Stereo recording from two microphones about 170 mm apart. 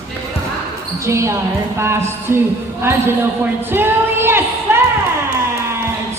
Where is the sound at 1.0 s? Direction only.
15° right (ahead or behind).